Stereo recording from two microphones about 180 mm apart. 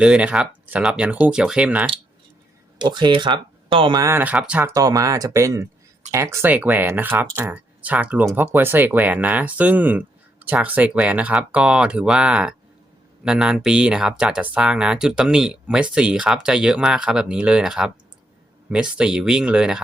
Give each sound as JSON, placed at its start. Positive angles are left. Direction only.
{"t": 0.0, "sound": "speech", "side_deg": -5}
{"t": 2.8, "sound": "speech", "side_deg": -25}
{"t": 4.0, "sound": "speech", "side_deg": -10}
{"t": 4.7, "sound": "speech", "side_deg": -20}